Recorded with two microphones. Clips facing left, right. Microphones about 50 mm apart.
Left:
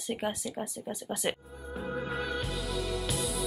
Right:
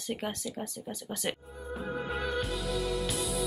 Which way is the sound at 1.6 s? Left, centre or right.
Centre.